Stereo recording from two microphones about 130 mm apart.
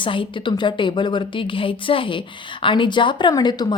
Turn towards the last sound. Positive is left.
turn(degrees=35)  # may be behind; listen again after turning